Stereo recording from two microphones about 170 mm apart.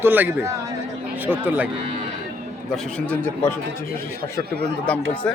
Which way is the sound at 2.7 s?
5° left (ahead or behind).